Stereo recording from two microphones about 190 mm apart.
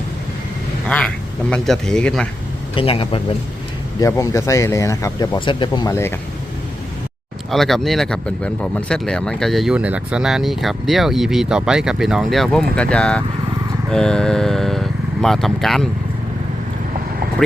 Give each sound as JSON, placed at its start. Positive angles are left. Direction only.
{"t": 0.9, "sound": "speech", "side_deg": 5}
{"t": 2.7, "sound": "speech", "side_deg": 30}
{"t": 4.0, "sound": "speech", "side_deg": 15}
{"t": 7.5, "sound": "speech", "side_deg": 0}